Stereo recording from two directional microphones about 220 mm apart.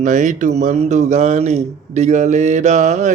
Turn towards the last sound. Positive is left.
turn(degrees=-35)  # may be behind; listen again after turning